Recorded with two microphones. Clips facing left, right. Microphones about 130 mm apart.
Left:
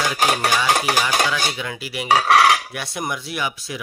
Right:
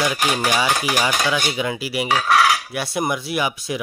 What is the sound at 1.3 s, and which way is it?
Speech, 10° right (ahead or behind).